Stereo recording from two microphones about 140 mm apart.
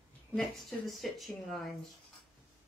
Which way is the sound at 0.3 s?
Centre (ahead or behind).